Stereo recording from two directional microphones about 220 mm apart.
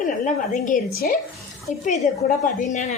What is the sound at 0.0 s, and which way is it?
A woman's voice, 35° left (ahead or behind).